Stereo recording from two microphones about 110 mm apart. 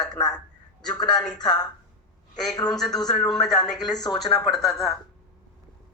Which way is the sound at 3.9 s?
40° left (ahead or behind).